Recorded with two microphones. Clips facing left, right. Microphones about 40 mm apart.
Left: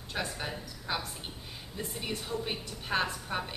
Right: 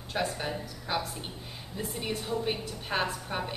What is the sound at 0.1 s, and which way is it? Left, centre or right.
A woman's voice, centre.